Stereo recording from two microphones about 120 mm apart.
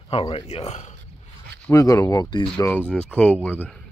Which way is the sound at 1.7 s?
25° left (ahead or behind).